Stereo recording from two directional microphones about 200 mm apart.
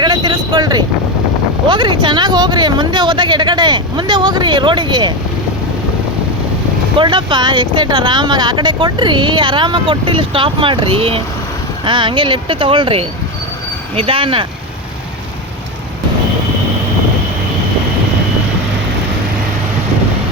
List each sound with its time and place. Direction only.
0.0 s vehicle: 20° right (ahead or behind)
1.6 s speech: 25° right (ahead or behind)
7.0 s speech: 25° right (ahead or behind)